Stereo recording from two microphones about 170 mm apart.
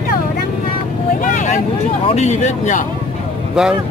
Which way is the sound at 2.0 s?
40° left (ahead or behind).